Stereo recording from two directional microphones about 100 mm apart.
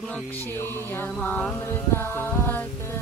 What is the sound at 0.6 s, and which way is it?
Music, 20° left (ahead or behind).